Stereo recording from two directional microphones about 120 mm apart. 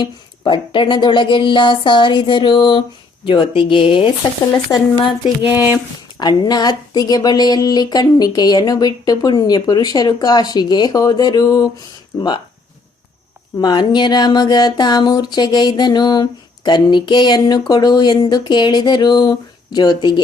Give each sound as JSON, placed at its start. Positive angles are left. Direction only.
{"t": 0.0, "sound": "a woman's voice", "side_deg": 40}
{"t": 4.5, "sound": "speech", "side_deg": 35}
{"t": 5.5, "sound": "speech", "side_deg": -15}
{"t": 6.1, "sound": "speech", "side_deg": 35}
{"t": 13.6, "sound": "speech", "side_deg": 35}